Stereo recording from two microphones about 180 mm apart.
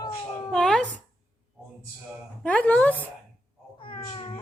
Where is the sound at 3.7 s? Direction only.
25° left (ahead or behind).